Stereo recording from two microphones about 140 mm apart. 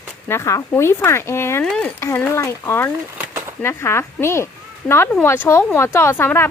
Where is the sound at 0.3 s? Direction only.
20° left (ahead or behind).